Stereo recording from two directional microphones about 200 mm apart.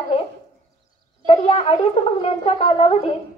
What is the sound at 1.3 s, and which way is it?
Speech, 30° left (ahead or behind).